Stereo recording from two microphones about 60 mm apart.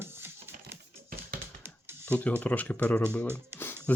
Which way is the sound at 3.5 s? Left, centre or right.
Right.